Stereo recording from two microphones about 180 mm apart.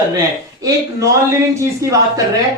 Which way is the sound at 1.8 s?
20° right (ahead or behind).